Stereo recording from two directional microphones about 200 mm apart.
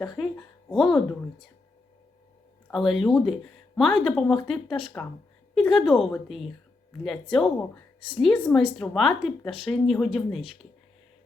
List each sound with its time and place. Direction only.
0.0 s speech: centre (ahead or behind)
2.6 s speech: centre (ahead or behind)